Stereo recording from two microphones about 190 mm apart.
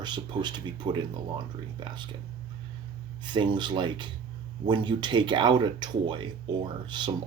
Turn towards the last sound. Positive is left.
turn(degrees=-25)  # may be behind; listen again after turning